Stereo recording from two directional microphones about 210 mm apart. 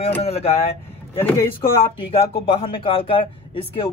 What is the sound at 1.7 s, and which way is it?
Speech, 25° left (ahead or behind).